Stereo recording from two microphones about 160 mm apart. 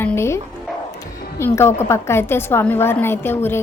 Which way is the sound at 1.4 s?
15° left (ahead or behind).